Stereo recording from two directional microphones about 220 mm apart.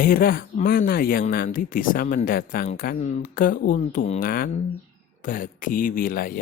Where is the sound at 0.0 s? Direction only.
40° left (ahead or behind).